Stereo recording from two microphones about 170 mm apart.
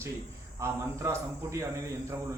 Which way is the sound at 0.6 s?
15° right (ahead or behind).